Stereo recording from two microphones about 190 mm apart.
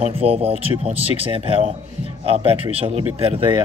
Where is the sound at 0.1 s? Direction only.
30° right (ahead or behind).